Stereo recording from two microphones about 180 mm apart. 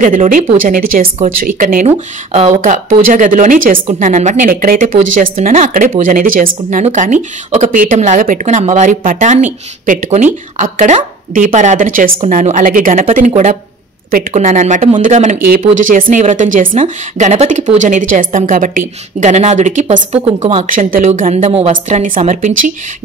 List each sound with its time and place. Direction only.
0.0 s a woman's voice: 45° right (ahead or behind)